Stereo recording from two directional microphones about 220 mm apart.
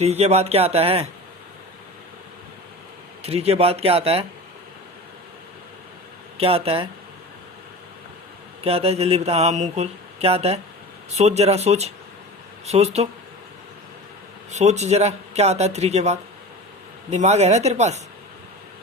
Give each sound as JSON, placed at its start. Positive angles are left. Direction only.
{"t": 0.0, "sound": "speech", "side_deg": -30}
{"t": 3.2, "sound": "speech", "side_deg": -30}
{"t": 6.3, "sound": "speech", "side_deg": -25}
{"t": 8.6, "sound": "speech", "side_deg": -25}
{"t": 14.5, "sound": "speech", "side_deg": -30}